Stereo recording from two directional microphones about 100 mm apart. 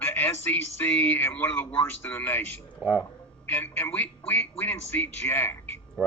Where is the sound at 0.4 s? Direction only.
20° left (ahead or behind).